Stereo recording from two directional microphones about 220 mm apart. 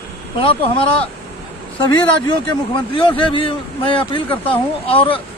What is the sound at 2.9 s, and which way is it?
A man's voice, 25° left (ahead or behind).